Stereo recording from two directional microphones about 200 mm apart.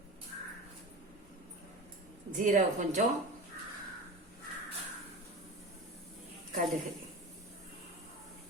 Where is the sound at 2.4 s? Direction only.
40° right (ahead or behind).